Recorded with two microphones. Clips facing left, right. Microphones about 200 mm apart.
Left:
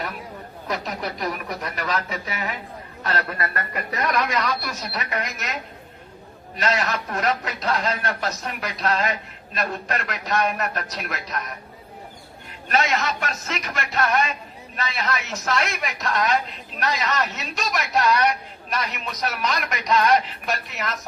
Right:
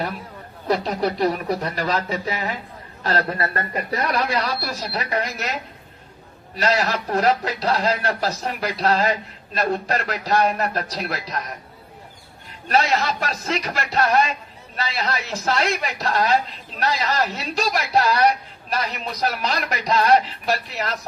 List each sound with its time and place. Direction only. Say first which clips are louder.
0.7 s speech: right 7 dB; 30° right (ahead or behind)
6.6 s speech: right 3 dB; 35° right (ahead or behind)
12.6 s speech: right 3 dB; 35° right (ahead or behind)